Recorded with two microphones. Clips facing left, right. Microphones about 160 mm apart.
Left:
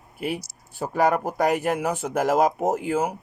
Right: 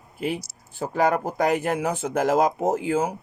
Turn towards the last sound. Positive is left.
turn(degrees=0)  # may be behind; listen again after turning